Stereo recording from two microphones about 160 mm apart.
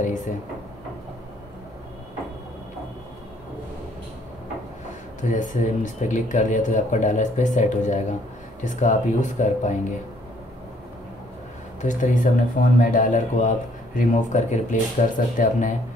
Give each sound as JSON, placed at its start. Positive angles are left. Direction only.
{"t": 0.0, "sound": "speech", "side_deg": 50}
{"t": 5.3, "sound": "speech", "side_deg": 50}
{"t": 11.8, "sound": "speech", "side_deg": 50}